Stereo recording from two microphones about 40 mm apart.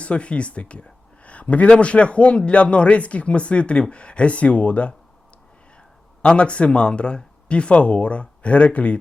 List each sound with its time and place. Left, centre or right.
0.0 s speech: left
6.2 s speech: left